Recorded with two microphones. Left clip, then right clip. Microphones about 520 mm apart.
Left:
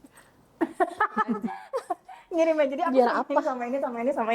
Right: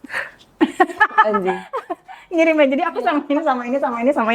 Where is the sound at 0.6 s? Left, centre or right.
Right.